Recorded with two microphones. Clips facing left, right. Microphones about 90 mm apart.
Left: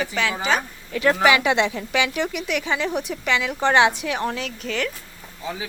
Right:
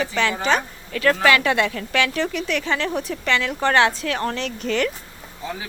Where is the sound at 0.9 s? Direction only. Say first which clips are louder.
Even; 15° left (ahead or behind); by 4.9 s centre (ahead or behind).